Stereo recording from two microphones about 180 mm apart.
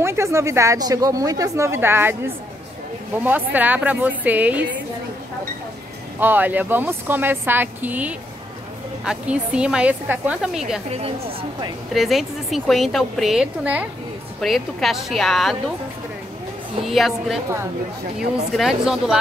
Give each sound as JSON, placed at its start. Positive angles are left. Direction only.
{"t": 0.0, "sound": "a woman's voice", "side_deg": -15}
{"t": 6.1, "sound": "a woman's voice", "side_deg": -10}
{"t": 11.9, "sound": "a woman's voice", "side_deg": 0}
{"t": 16.8, "sound": "a woman's voice", "side_deg": 0}
{"t": 18.5, "sound": "a woman's voice", "side_deg": 0}